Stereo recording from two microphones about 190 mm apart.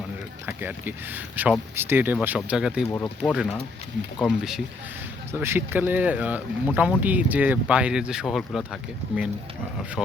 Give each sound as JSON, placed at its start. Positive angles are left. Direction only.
{"t": 0.4, "sound": "speech", "side_deg": -10}
{"t": 2.9, "sound": "speech", "side_deg": 5}